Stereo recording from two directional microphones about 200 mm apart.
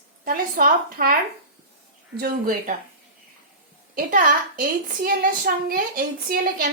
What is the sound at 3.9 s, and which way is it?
A woman's voice, 40° right (ahead or behind).